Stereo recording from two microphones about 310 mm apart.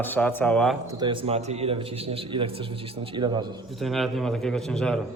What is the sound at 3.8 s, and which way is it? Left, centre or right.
A man's voice, centre.